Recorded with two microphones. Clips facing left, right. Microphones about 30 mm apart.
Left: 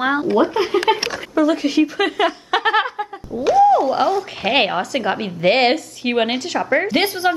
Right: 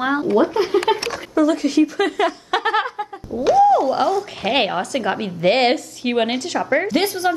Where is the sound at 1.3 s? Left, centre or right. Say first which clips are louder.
Even; centre.